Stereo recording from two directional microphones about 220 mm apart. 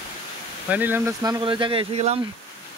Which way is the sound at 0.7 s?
10° right (ahead or behind).